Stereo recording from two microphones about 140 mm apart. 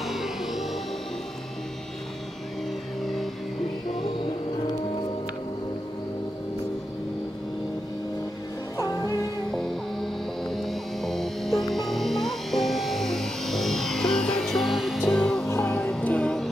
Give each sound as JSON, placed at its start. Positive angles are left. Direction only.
{"t": 0.0, "sound": "music", "side_deg": 0}
{"t": 3.0, "sound": "music", "side_deg": 0}
{"t": 8.7, "sound": "music", "side_deg": 25}
{"t": 9.5, "sound": "music", "side_deg": 0}
{"t": 15.4, "sound": "music", "side_deg": 20}
{"t": 15.7, "sound": "music", "side_deg": 10}